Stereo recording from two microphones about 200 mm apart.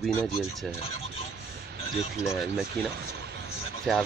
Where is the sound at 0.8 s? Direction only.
30° left (ahead or behind).